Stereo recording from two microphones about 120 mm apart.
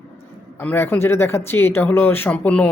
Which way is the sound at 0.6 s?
15° left (ahead or behind).